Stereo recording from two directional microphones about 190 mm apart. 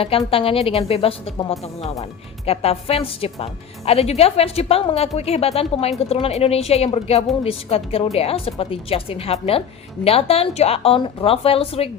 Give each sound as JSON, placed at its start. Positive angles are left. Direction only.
{"t": 0.3, "sound": "a woman's voice", "side_deg": 30}